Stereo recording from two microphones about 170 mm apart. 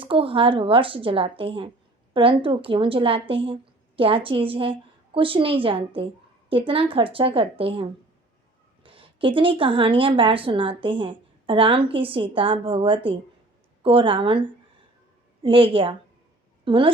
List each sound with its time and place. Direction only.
0.0 s a woman's voice: 30° right (ahead or behind)